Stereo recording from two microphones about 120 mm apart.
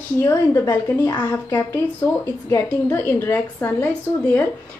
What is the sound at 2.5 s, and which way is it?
A woman's voice, 15° left (ahead or behind).